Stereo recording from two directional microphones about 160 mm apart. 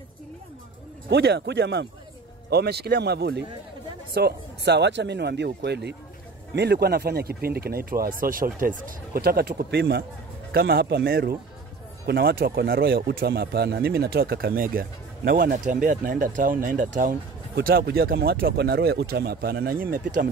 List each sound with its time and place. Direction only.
1.1 s speech: 90° right
10.5 s speech: 75° right (ahead or behind); by 17.1 s 55° right (ahead or behind)
17.6 s speech: 75° right (ahead or behind)